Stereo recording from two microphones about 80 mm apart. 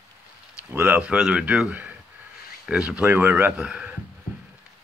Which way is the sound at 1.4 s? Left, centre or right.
Centre.